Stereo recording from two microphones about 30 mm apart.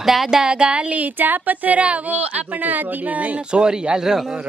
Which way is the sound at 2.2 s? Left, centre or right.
Right.